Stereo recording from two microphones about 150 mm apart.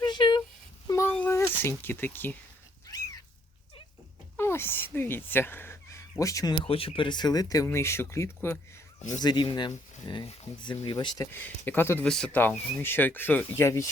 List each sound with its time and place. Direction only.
0.0 s a sound: 30° left (ahead or behind); by 2.3 s 15° left (ahead or behind)
2.8 s cat: 25° left (ahead or behind)
4.4 s speech: 15° left (ahead or behind)